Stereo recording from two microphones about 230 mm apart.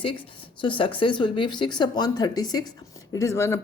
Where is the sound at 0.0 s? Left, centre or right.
Left.